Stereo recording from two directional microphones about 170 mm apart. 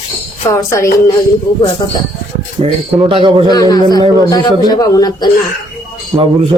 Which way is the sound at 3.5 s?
25° left (ahead or behind).